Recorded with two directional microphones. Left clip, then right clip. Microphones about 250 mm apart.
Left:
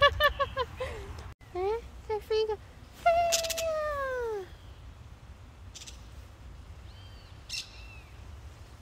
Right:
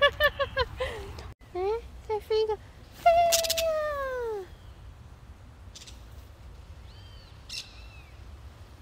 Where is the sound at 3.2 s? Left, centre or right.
Right.